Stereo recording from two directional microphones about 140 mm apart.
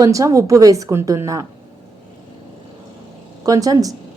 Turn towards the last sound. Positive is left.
turn(degrees=-25)  # may be behind; listen again after turning